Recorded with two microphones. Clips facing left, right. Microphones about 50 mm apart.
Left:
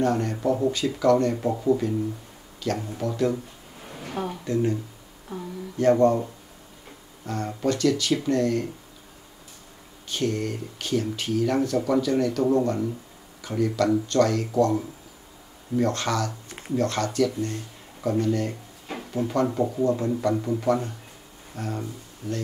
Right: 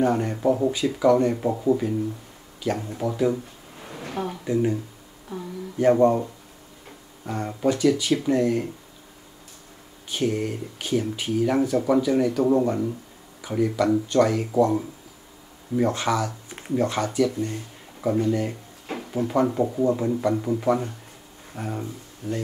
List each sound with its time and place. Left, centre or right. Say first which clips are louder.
0.0 s speech: right 2 dB; centre
3.8 s a sound: right 2 dB; right
4.3 s speech: right 2 dB; centre
5.8 s speech: right 1 dB; centre
7.2 s speech: right 2 dB; centre
10.0 s speech: right 2 dB; centre
18.9 s a sound: right 1 dB; right
19.2 s speech: right 2 dB; centre
22.2 s speech: right 2 dB; right